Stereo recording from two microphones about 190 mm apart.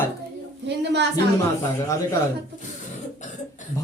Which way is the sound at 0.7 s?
65° right (ahead or behind).